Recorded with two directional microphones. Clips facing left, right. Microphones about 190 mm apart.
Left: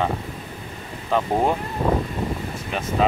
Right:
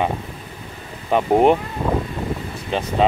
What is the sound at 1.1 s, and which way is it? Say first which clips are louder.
Speech: right 6 dB; 20° right (ahead or behind).